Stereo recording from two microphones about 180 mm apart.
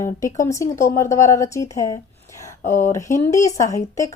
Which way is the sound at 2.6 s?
45° left (ahead or behind).